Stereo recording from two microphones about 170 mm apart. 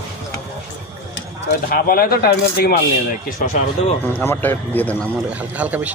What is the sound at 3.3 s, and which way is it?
Speech, 50° left (ahead or behind).